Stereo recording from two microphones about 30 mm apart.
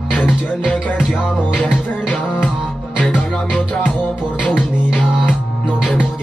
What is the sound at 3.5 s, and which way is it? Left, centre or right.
Music, left.